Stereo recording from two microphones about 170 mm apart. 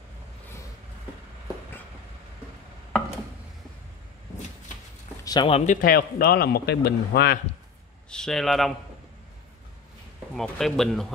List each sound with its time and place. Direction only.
5.2 s a sound: 25° left (ahead or behind)
5.5 s speech: 50° left (ahead or behind); by 7.3 s 65° left (ahead or behind)
8.1 s speech: 5° left (ahead or behind)
10.3 s speech: centre (ahead or behind)